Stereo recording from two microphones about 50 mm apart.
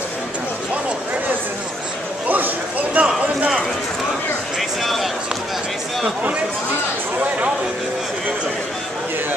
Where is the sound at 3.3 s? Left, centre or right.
Right.